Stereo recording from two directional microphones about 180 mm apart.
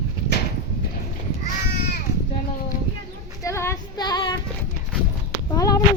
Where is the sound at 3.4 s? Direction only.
15° left (ahead or behind).